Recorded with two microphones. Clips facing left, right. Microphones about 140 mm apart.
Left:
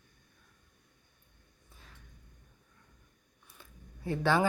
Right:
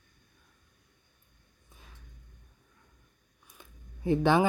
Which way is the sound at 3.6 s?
20° right (ahead or behind).